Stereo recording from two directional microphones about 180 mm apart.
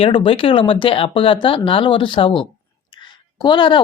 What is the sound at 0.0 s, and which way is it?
Speech, 30° left (ahead or behind).